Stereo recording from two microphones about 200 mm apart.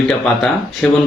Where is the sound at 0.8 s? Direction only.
5° left (ahead or behind).